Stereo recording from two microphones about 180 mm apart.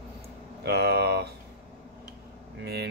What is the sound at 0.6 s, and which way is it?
Speech, 65° right (ahead or behind).